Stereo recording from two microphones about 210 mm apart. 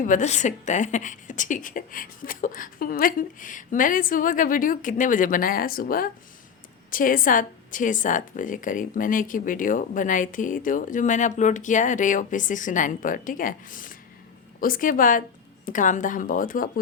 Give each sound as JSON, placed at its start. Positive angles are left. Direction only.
{"t": 0.0, "sound": "speech", "side_deg": 35}